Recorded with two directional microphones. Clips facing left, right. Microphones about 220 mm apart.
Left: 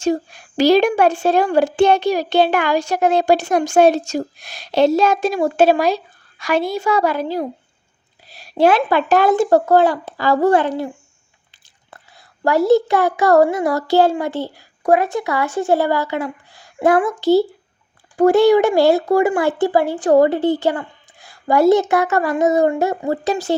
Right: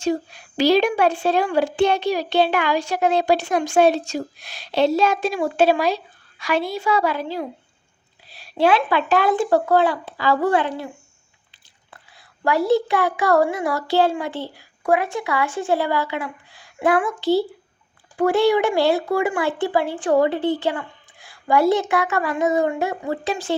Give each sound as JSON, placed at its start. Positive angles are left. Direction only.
{"t": 0.0, "sound": "a woman's voice", "side_deg": 45}
{"t": 11.9, "sound": "a child's voice", "side_deg": 45}